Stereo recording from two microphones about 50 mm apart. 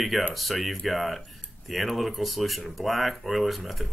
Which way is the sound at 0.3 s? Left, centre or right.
Centre.